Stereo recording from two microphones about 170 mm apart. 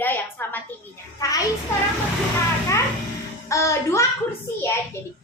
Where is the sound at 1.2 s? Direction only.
20° left (ahead or behind).